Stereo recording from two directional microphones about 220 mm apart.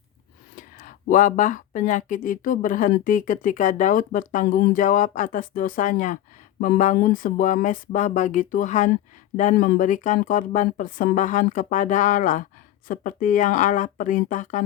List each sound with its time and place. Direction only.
0.5 s speech: 40° left (ahead or behind)